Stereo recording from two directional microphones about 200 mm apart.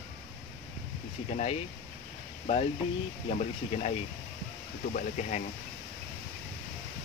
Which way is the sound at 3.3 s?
35° left (ahead or behind).